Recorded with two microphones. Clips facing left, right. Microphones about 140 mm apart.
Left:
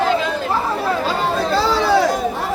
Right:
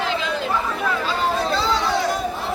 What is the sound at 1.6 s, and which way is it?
Chatter, 65° left (ahead or behind).